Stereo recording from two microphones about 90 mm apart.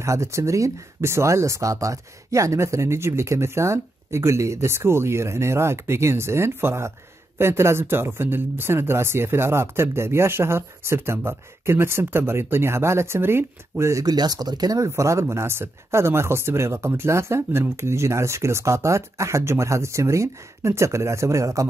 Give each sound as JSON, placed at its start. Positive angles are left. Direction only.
{"t": 0.0, "sound": "speech", "side_deg": -35}
{"t": 14.0, "sound": "speech", "side_deg": -45}
{"t": 14.9, "sound": "speech", "side_deg": -35}